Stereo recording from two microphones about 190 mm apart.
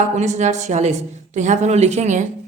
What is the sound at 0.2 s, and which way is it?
A woman's voice, 40° right (ahead or behind).